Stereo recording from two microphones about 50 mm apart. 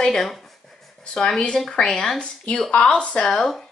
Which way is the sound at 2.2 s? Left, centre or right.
Left.